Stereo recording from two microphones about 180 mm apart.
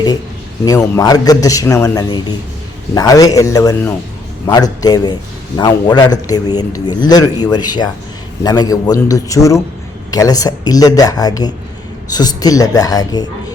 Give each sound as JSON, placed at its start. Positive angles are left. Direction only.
{"t": 0.6, "sound": "speech", "side_deg": 20}